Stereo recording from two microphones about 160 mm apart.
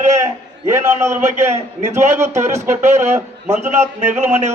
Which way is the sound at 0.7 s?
15° right (ahead or behind).